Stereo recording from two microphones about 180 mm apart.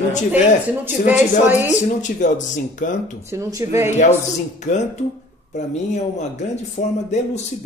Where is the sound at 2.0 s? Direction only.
45° left (ahead or behind).